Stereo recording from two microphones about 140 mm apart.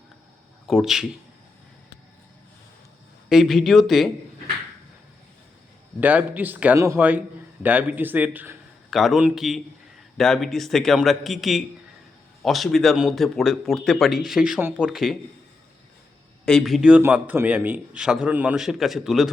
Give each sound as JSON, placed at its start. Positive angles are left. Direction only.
{"t": 0.7, "sound": "speech", "side_deg": -5}
{"t": 3.2, "sound": "speech", "side_deg": 0}
{"t": 6.0, "sound": "a man's voice", "side_deg": -10}
{"t": 7.6, "sound": "a man's voice", "side_deg": -10}
{"t": 8.9, "sound": "speech", "side_deg": 0}
{"t": 16.5, "sound": "speech", "side_deg": 0}
{"t": 17.0, "sound": "a man's voice", "side_deg": -15}